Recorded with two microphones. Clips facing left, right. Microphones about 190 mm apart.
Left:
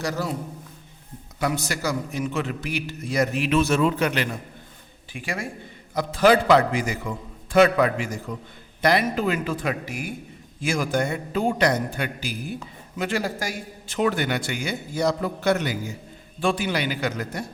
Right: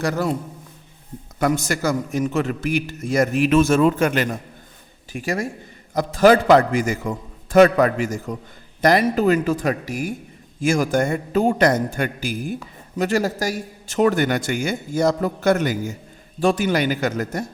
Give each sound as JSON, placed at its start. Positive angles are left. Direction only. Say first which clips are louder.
{"t": 0.0, "sound": "a man's voice", "louder": "right 5 dB", "side_deg": -55}
{"t": 1.4, "sound": "a man's voice", "louder": "right 5 dB", "side_deg": -50}